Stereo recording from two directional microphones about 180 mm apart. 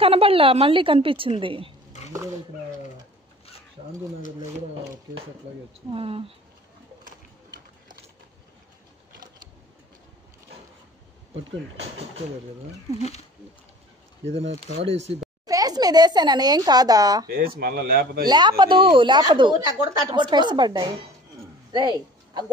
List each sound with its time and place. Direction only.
0.0 s a woman's voice: 30° right (ahead or behind)
5.9 s a woman's voice: 30° right (ahead or behind)
14.7 s a woman's voice: 35° right (ahead or behind)
15.4 s speech: 20° right (ahead or behind)
17.6 s speech: 55° right (ahead or behind)
18.2 s speech: 25° right (ahead or behind)